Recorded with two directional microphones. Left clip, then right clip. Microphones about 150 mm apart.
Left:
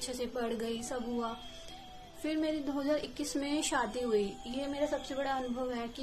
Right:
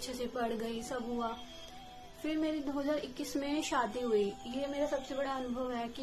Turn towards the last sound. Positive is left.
turn(degrees=20)  # may be behind; listen again after turning